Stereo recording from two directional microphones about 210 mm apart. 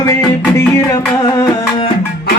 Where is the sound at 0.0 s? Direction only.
15° left (ahead or behind).